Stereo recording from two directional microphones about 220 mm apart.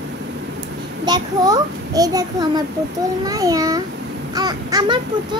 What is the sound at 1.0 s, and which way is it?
A child's voice, 15° right (ahead or behind).